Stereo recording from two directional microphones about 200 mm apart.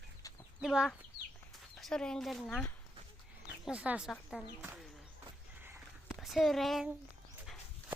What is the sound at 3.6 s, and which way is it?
Speech, 5° right (ahead or behind).